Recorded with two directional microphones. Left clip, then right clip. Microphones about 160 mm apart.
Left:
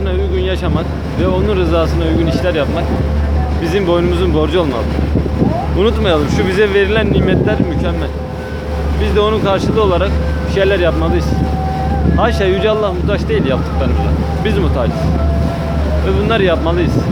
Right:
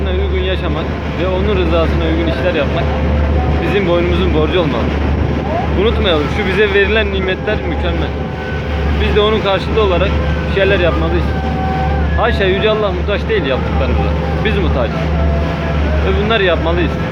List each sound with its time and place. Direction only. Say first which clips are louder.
1.5 s speech: even; 30° left (ahead or behind)
3.8 s speech: left 1 dB; 25° left (ahead or behind)
5.8 s speech: left 1 dB; 25° left (ahead or behind)
9.1 s speech: even; 15° left (ahead or behind)
9.7 s speech: even; 25° left (ahead or behind)
12.2 s speech: even; 25° left (ahead or behind)
16.3 s speech: even; 20° left (ahead or behind)